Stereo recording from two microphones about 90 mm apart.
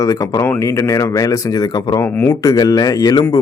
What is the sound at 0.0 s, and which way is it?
A man's voice, 40° left (ahead or behind).